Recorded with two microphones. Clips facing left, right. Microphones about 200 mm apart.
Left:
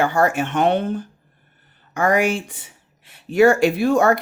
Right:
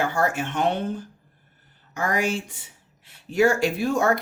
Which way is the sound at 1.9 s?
70° left (ahead or behind).